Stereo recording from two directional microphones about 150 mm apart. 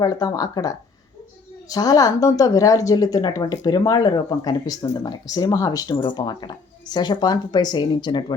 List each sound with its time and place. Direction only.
0.0 s a woman's voice: 25° left (ahead or behind)